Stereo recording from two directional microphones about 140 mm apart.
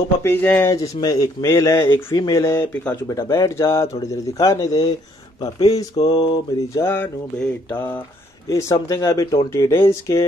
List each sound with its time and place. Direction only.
0.2 s speech: 15° left (ahead or behind)
5.9 s mantra: 40° left (ahead or behind)
6.7 s mantra: 15° left (ahead or behind)
8.5 s speech: 20° left (ahead or behind)